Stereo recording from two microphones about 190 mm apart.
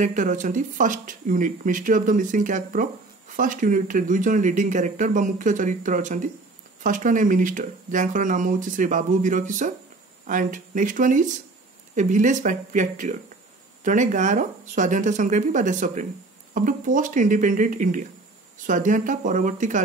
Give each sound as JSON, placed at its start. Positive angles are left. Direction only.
{"t": 0.0, "sound": "speech", "side_deg": -40}